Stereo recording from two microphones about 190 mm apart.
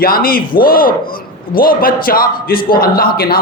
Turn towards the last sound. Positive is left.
turn(degrees=50)  # may be behind; listen again after turning